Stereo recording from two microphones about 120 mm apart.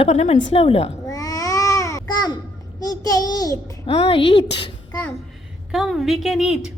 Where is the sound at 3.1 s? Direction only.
35° left (ahead or behind).